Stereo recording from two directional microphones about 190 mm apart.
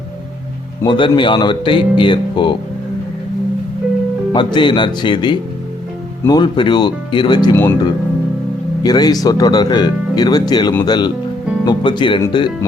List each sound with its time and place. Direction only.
0.8 s speech: 25° left (ahead or behind)
4.3 s speech: 25° left (ahead or behind)
7.5 s speech: 10° left (ahead or behind)
8.8 s speech: 20° left (ahead or behind)